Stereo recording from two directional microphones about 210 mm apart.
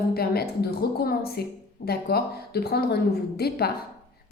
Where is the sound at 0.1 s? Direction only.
50° left (ahead or behind).